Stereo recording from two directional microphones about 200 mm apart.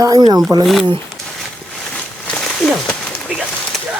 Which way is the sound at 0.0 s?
20° right (ahead or behind).